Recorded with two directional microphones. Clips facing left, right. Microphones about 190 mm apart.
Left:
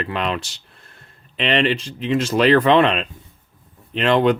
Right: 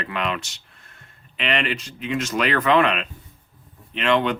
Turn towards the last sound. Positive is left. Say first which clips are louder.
# left 4 dB
turn(degrees=40)  # may be behind; listen again after turning